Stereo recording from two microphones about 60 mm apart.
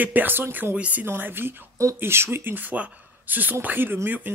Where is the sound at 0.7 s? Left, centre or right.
Right.